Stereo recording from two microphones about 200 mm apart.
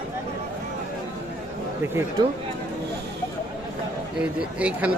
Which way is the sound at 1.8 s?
10° right (ahead or behind).